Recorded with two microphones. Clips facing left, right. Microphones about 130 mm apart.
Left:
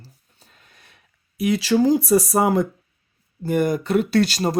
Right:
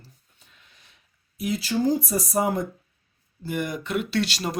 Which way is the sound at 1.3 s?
70° left (ahead or behind).